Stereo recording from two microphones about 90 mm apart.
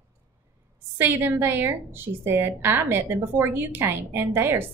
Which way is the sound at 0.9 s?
25° right (ahead or behind).